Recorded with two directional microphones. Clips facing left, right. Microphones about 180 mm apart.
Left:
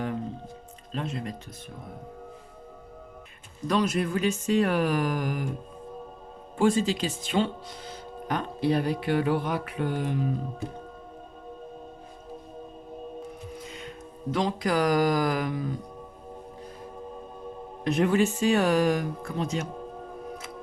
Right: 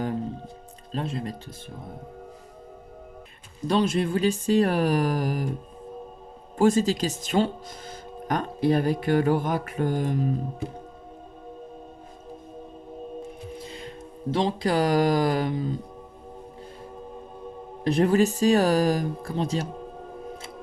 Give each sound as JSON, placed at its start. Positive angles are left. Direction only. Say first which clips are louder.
{"t": 0.9, "sound": "speech", "louder": "right 2 dB", "side_deg": -35}
{"t": 3.7, "sound": "speech", "louder": "right 2 dB", "side_deg": -30}
{"t": 6.6, "sound": "speech", "louder": "right 3 dB", "side_deg": -40}
{"t": 13.6, "sound": "mantra", "louder": "right 2 dB", "side_deg": -30}
{"t": 17.8, "sound": "speech", "louder": "right 3 dB", "side_deg": -35}